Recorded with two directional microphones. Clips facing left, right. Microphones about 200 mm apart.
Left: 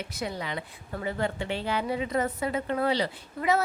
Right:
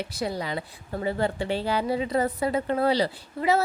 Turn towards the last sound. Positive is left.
turn(degrees=-30)  # may be behind; listen again after turning